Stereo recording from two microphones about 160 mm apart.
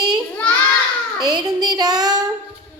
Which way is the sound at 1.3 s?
25° right (ahead or behind).